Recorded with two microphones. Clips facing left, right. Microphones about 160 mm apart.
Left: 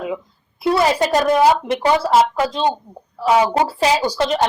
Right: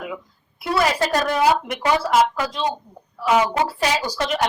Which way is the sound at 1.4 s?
30° left (ahead or behind).